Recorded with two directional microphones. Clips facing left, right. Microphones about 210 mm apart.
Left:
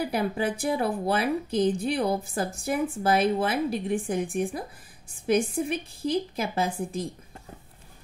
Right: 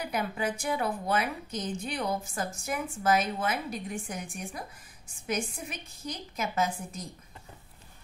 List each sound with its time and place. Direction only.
0.0 s a woman's voice: 35° left (ahead or behind)